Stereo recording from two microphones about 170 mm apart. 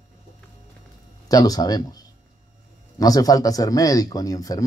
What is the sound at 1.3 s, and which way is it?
Speech, 20° left (ahead or behind).